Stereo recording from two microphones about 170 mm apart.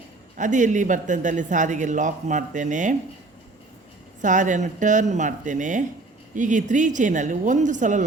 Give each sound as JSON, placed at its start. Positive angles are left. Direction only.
{"t": 0.3, "sound": "a man's voice", "side_deg": -45}
{"t": 4.2, "sound": "a man's voice", "side_deg": -45}